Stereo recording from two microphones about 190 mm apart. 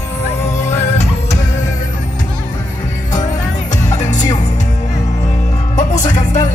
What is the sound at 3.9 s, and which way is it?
Music, 35° left (ahead or behind).